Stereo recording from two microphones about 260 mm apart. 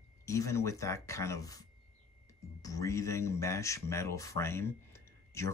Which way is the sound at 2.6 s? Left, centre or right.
Centre.